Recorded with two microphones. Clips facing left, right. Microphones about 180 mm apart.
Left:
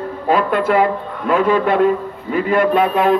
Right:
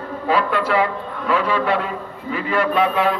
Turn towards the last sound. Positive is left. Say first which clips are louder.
# left 4 dB
turn(degrees=50)  # may be behind; listen again after turning